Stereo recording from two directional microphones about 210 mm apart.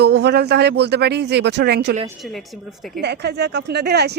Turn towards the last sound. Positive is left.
turn(degrees=-50)  # may be behind; listen again after turning